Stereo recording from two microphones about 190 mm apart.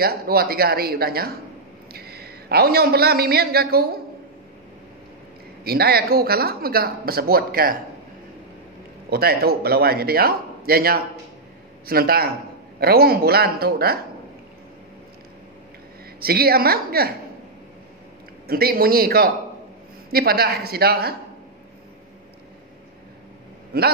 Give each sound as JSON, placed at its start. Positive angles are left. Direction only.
{"t": 0.0, "sound": "a man's voice", "side_deg": -55}
{"t": 5.6, "sound": "speech", "side_deg": -55}
{"t": 9.1, "sound": "speech", "side_deg": -55}
{"t": 16.2, "sound": "speech", "side_deg": -55}
{"t": 18.5, "sound": "speech", "side_deg": -50}
{"t": 23.7, "sound": "speech", "side_deg": -55}